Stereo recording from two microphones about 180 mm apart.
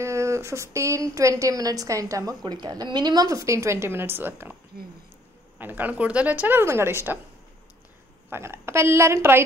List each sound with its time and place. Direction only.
0.0 s a woman's voice: 15° right (ahead or behind)
5.6 s a woman's voice: 10° right (ahead or behind)
8.3 s a woman's voice: 15° right (ahead or behind)